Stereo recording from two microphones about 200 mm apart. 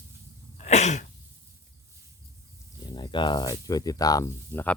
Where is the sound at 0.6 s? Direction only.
35° left (ahead or behind).